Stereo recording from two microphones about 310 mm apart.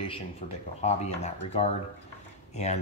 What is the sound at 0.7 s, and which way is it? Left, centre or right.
Speech, left.